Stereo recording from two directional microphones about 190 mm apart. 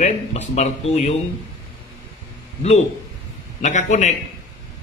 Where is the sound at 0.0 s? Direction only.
35° left (ahead or behind).